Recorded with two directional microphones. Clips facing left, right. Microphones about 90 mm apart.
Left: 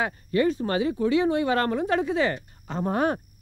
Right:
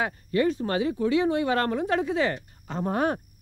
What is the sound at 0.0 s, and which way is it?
Speech, 35° left (ahead or behind).